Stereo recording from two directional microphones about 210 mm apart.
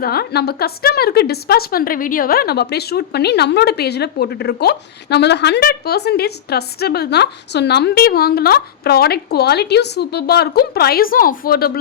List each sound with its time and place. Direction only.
0.0 s a woman's voice: 45° left (ahead or behind)